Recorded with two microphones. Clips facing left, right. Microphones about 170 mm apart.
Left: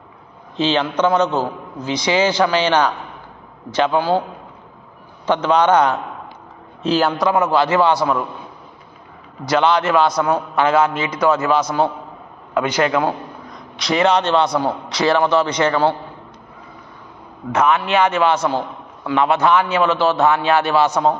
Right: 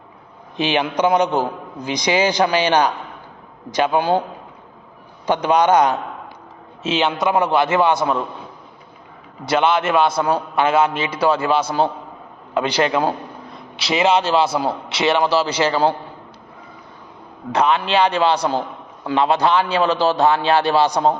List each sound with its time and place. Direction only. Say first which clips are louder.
0.5 s a man's voice: left 1 dB; 15° right (ahead or behind)
5.2 s a man's voice: left 1 dB; 10° right (ahead or behind)
7.2 s a man's voice: left 1 dB; 25° right (ahead or behind)
9.5 s a man's voice: left 1 dB; 25° right (ahead or behind)
13.5 s a sound: left 2 dB; 30° right (ahead or behind)
14.0 s a man's voice: even; 5° right (ahead or behind)
14.8 s a man's voice: left 2 dB; 25° right (ahead or behind)
17.5 s a man's voice: left 1 dB; 30° right (ahead or behind)